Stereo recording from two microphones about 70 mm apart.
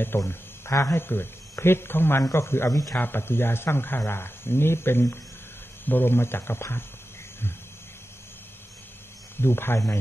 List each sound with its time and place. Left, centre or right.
0.3 s speech: left
9.4 s speech: left